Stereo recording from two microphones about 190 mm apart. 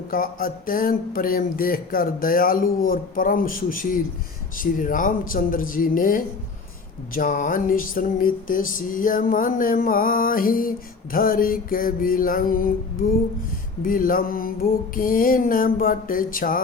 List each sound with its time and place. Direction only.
0.1 s speech: 50° left (ahead or behind)